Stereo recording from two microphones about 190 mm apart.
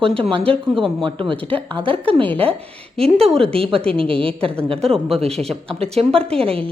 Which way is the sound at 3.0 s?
30° right (ahead or behind).